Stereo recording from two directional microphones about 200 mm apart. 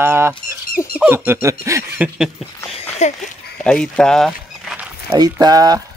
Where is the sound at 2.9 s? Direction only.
35° left (ahead or behind).